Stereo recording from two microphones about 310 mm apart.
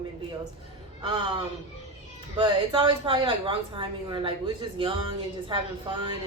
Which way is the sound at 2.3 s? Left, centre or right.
Centre.